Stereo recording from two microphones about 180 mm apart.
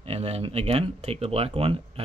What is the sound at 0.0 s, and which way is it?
Speech, 35° right (ahead or behind).